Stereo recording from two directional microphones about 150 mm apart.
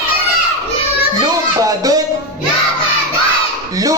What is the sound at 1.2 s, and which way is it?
Music, 25° right (ahead or behind).